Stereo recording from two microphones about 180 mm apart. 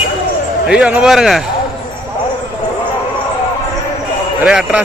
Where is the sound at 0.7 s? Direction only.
5° right (ahead or behind).